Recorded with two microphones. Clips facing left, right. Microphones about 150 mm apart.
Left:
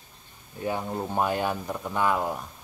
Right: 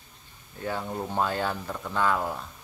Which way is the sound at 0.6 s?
15° left (ahead or behind).